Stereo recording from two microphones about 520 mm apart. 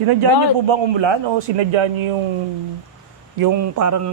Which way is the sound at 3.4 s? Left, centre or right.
Right.